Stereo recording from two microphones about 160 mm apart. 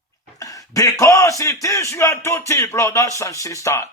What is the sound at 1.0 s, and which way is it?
Speech, 20° left (ahead or behind).